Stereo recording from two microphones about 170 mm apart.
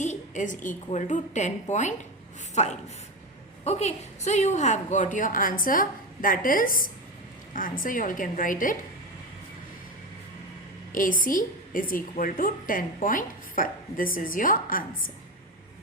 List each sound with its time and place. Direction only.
0.0 s a woman's voice: 45° left (ahead or behind)
10.9 s a woman's voice: 50° left (ahead or behind)